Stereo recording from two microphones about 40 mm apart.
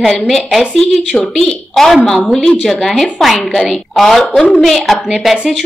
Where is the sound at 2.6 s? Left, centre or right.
Centre.